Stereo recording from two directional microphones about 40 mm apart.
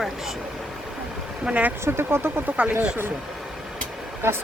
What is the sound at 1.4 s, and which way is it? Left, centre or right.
Speech, right.